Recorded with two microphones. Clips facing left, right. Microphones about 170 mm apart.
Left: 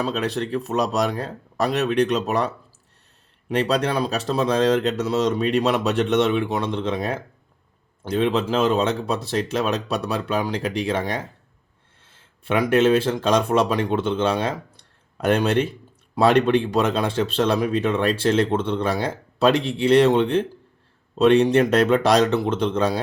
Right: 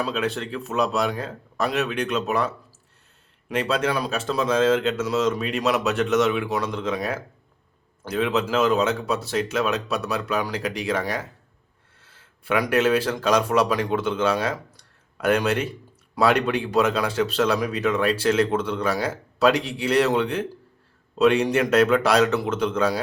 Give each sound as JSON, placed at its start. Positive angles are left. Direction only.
{"t": 0.0, "sound": "speech", "side_deg": 35}
{"t": 3.5, "sound": "speech", "side_deg": 35}